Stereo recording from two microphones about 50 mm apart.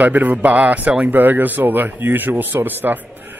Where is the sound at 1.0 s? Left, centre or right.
Right.